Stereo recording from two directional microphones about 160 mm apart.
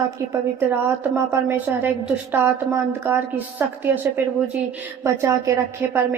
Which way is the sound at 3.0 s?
15° right (ahead or behind).